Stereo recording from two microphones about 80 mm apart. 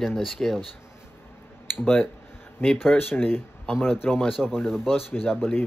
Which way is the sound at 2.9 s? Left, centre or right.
Left.